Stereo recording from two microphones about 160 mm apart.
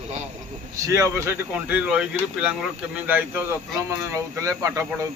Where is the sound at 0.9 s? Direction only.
20° right (ahead or behind).